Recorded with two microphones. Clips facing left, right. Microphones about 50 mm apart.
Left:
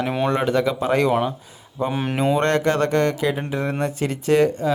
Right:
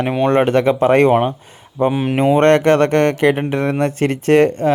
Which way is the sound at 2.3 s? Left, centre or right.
Right.